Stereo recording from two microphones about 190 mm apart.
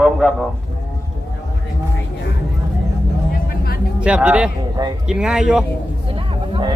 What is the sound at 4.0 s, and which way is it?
Speech, 5° right (ahead or behind).